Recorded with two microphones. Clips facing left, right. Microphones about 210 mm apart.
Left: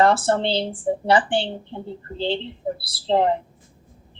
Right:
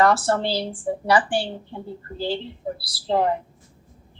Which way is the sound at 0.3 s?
25° left (ahead or behind).